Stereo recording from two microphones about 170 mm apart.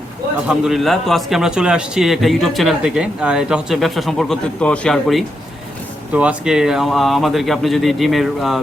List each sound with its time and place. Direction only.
0.4 s a man's voice: centre (ahead or behind)